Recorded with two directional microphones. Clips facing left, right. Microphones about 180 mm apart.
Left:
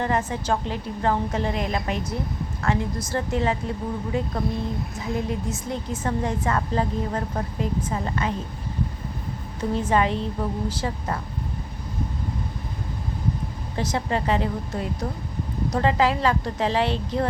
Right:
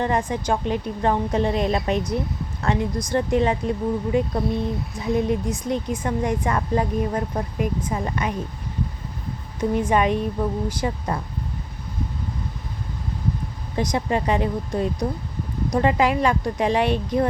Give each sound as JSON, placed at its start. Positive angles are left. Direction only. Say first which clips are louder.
{"t": 0.0, "sound": "a woman's voice", "louder": "right 2 dB", "side_deg": -15}
{"t": 9.6, "sound": "a woman's voice", "louder": "right 2 dB", "side_deg": -15}
{"t": 13.7, "sound": "a woman's voice", "louder": "right 3 dB", "side_deg": -15}